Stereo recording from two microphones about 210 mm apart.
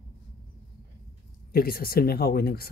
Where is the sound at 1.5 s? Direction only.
45° left (ahead or behind).